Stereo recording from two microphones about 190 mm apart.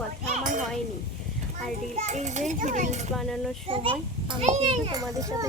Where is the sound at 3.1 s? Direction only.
Centre (ahead or behind).